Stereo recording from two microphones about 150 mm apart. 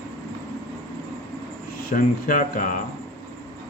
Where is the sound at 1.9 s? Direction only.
65° left (ahead or behind).